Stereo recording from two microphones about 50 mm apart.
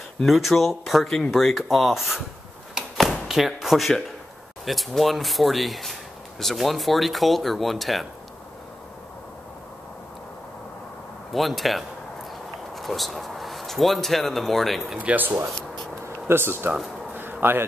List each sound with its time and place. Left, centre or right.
0.3 s speech: centre
3.0 s a sound: centre
4.6 s speech: centre
11.3 s speech: centre
15.0 s speech: right
16.3 s speech: right
17.1 s a sound: right